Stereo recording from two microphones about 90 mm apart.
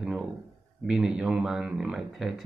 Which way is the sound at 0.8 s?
5° right (ahead or behind).